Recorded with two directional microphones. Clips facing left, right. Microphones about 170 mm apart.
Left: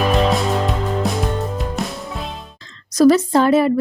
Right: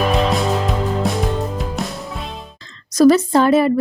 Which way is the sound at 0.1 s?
Centre (ahead or behind).